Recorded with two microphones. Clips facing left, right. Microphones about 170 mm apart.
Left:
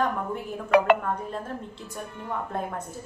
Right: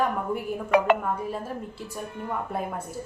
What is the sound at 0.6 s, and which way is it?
Speech, 65° left (ahead or behind).